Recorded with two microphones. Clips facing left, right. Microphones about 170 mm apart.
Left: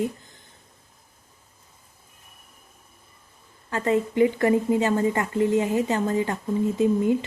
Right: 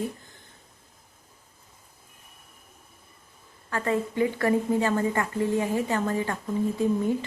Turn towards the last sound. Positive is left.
turn(degrees=20)  # may be behind; listen again after turning